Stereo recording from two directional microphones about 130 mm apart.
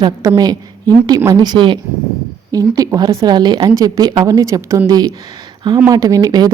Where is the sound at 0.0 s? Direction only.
30° right (ahead or behind).